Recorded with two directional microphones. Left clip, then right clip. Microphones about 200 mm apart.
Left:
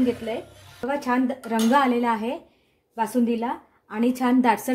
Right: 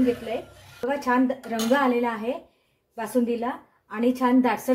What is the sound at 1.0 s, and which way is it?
A woman's voice, 45° left (ahead or behind).